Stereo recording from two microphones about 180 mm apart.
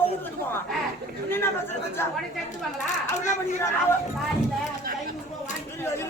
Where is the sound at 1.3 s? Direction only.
10° left (ahead or behind).